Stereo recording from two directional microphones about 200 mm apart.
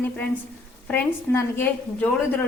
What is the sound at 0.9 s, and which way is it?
A woman's voice, 10° left (ahead or behind).